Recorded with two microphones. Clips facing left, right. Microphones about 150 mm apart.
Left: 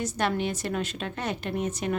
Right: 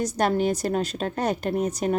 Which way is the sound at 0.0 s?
40° right (ahead or behind).